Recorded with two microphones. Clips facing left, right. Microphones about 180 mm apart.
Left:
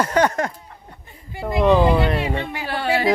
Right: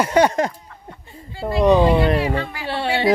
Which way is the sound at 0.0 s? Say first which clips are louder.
Right 2 dB; 10° right (ahead or behind).